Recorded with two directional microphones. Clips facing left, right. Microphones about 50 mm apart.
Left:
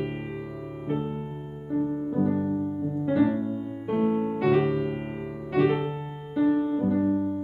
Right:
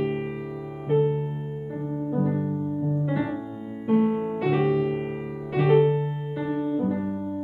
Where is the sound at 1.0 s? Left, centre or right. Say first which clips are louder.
Right 8 dB; centre.